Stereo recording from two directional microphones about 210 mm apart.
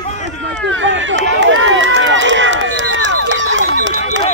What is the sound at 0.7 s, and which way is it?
Speech, 65° right (ahead or behind).